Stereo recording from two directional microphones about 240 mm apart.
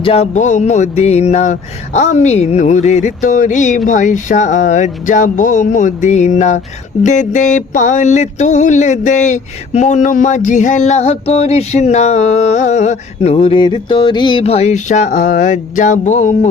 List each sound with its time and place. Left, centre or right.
0.0 s mantra: left
3.8 s speech: left
7.0 s mantra: left